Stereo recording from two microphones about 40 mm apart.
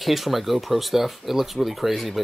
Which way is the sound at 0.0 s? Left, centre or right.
Centre.